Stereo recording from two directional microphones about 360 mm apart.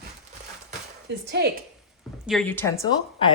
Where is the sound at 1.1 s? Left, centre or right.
Right.